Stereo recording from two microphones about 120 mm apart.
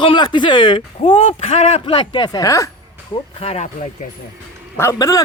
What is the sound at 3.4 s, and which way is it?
Speech, 55° left (ahead or behind).